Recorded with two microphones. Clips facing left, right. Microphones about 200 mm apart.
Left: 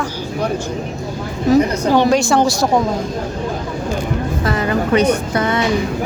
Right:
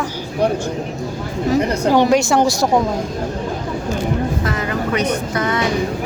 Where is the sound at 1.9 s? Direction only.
15° right (ahead or behind).